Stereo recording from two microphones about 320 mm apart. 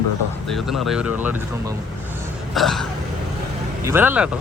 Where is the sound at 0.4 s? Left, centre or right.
Centre.